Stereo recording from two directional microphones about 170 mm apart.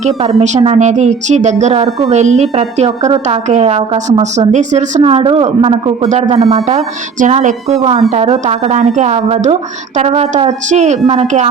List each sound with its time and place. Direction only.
0.0 s a woman's voice: 35° right (ahead or behind)